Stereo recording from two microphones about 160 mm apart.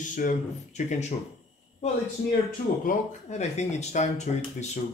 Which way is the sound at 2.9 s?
45° left (ahead or behind).